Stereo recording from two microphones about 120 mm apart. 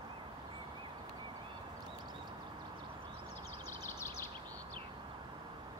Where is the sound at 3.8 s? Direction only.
20° left (ahead or behind).